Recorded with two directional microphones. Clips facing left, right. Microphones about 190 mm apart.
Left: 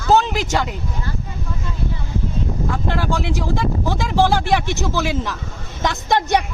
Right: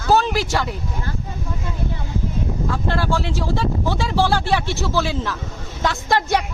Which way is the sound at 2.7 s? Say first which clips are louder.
Right 1 dB; 15° left (ahead or behind).